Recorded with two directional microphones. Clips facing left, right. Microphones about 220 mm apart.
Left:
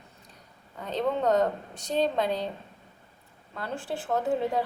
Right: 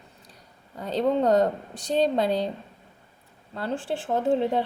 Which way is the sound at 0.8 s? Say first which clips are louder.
Right 4 dB; 35° right (ahead or behind).